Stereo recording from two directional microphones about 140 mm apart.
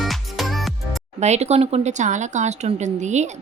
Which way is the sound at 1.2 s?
55° right (ahead or behind).